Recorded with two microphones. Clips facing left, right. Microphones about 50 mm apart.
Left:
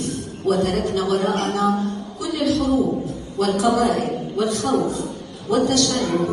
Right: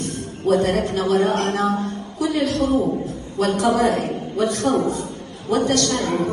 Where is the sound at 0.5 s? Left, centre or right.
Right.